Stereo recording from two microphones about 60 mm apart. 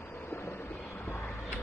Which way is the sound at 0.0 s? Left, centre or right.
Left.